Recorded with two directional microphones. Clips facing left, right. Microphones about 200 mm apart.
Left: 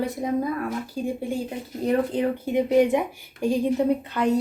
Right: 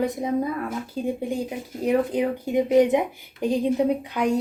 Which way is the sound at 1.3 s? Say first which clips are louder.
Right 1 dB; 10° right (ahead or behind).